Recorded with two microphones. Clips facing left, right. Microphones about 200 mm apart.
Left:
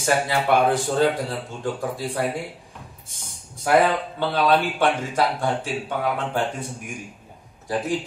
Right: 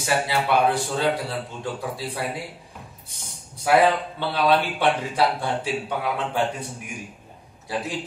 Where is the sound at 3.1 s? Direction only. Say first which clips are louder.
Even; 50° left (ahead or behind).